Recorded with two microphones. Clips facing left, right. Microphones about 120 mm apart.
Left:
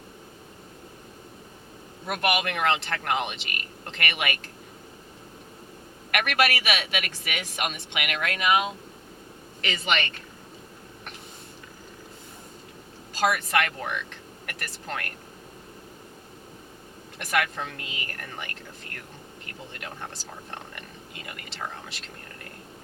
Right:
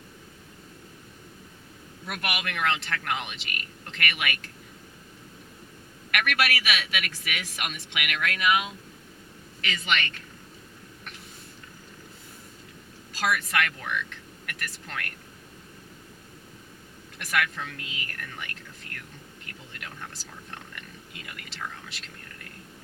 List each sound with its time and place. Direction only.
2.0 s a man's voice: 35° left (ahead or behind)
6.1 s a man's voice: 35° left (ahead or behind)
13.1 s speech: 30° left (ahead or behind)
17.2 s a man's voice: 35° left (ahead or behind)
19.7 s a man's voice: 35° left (ahead or behind)